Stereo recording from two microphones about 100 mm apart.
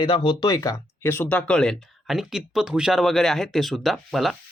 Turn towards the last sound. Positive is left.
turn(degrees=0)  # may be behind; listen again after turning